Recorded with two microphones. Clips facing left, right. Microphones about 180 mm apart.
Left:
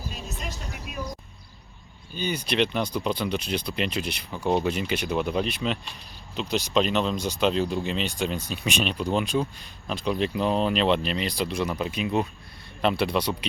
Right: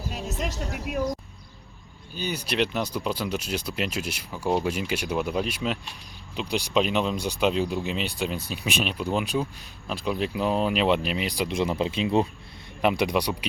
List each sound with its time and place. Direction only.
0.1 s speech: 80° right
2.1 s speech: 5° right (ahead or behind)
11.5 s speech: 25° right (ahead or behind)
12.8 s speech: 15° right (ahead or behind)